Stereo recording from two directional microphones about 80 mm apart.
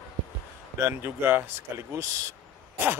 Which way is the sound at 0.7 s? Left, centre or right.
Right.